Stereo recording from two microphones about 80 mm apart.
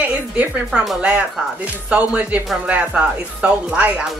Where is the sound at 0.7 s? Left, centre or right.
Centre.